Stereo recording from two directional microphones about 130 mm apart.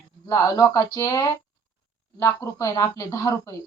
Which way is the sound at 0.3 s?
30° left (ahead or behind).